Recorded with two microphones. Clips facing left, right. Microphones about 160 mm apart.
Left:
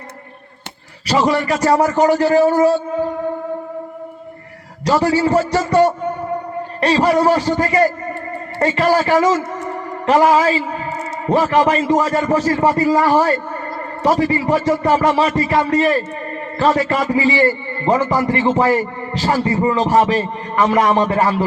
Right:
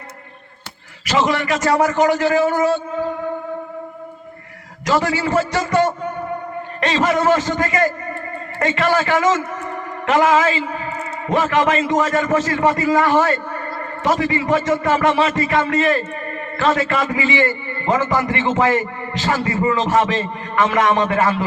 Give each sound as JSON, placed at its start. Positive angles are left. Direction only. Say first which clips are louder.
{"t": 1.0, "sound": "a man's voice", "louder": "left 2 dB", "side_deg": 35}
{"t": 4.9, "sound": "a man's voice", "louder": "left 4 dB", "side_deg": 35}
{"t": 11.5, "sound": "a man's voice", "louder": "left 1 dB", "side_deg": 30}